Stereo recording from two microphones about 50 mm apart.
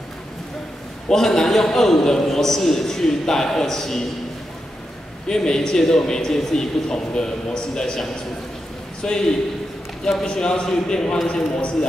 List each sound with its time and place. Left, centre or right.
1.0 s a man's voice: centre
5.3 s a man's voice: centre